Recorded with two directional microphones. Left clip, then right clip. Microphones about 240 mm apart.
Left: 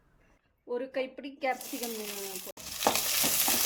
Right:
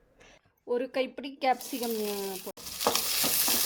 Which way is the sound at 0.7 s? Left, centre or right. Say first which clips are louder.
Right 4 dB; right.